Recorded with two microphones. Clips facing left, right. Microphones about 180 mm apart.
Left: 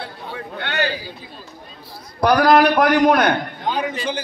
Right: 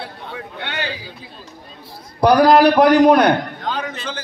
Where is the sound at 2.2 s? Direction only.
30° right (ahead or behind).